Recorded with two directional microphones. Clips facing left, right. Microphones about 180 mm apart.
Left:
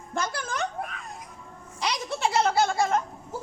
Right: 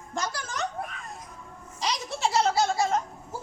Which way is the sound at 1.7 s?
60° left (ahead or behind).